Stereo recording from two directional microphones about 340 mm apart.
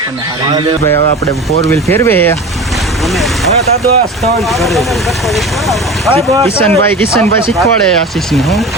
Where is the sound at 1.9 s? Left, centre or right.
Centre.